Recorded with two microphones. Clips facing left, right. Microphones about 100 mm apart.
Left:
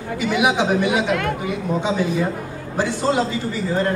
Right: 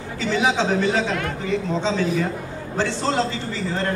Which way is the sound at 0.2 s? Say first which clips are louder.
Left 2 dB; 15° left (ahead or behind).